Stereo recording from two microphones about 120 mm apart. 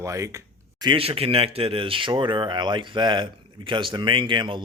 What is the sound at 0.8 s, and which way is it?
Speech, 45° right (ahead or behind).